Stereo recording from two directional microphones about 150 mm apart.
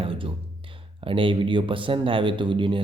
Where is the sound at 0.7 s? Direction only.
35° right (ahead or behind).